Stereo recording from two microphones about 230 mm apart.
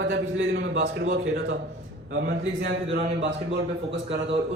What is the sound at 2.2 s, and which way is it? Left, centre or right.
Speech, right.